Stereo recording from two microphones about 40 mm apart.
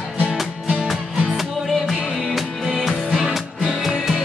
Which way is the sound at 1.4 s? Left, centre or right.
Centre.